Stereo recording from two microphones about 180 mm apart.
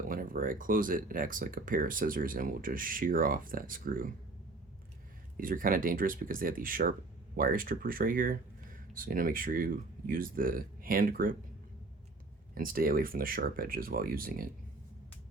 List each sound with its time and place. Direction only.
0.1 s speech: 50° right (ahead or behind)
5.4 s speech: 50° right (ahead or behind)
12.5 s speech: 55° right (ahead or behind)